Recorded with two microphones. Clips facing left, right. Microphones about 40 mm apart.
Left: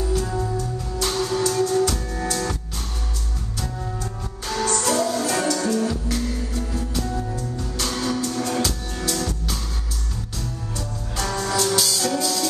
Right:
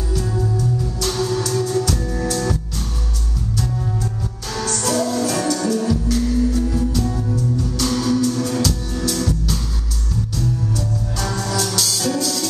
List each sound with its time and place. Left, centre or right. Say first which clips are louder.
0.1 s music: even; centre
1.2 s music: right 1 dB; centre
4.8 s music: right 6 dB; centre
6.7 s music: right 5 dB; centre